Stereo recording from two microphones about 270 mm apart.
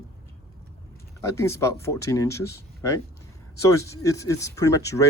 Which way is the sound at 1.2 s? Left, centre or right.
Centre.